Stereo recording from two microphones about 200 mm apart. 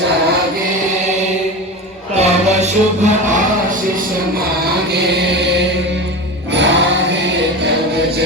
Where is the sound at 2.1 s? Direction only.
35° right (ahead or behind).